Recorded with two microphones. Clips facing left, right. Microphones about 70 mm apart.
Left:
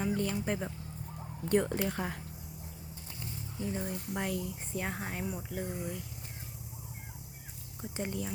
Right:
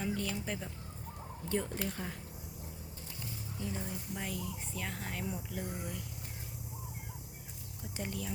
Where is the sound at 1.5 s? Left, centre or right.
Left.